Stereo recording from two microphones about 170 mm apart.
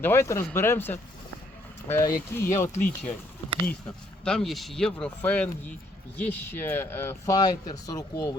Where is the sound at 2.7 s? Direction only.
45° left (ahead or behind).